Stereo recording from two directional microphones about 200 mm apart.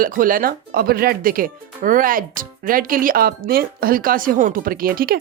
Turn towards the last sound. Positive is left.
turn(degrees=-50)  # may be behind; listen again after turning